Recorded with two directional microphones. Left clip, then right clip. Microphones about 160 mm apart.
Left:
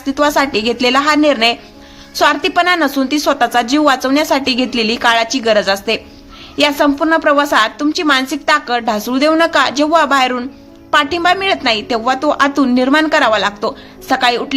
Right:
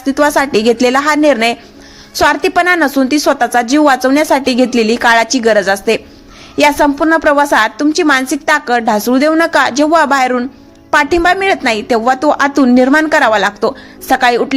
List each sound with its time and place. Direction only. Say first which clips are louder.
0.0 s a woman's voice: right 2 dB; 40° right (ahead or behind)